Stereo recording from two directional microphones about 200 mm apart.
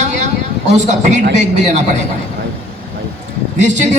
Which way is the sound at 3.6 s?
35° right (ahead or behind).